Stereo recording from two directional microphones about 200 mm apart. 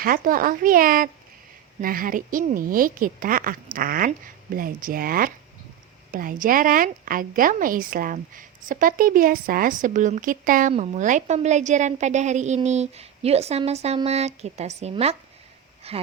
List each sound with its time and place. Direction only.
0.0 s a woman's voice: 45° right (ahead or behind)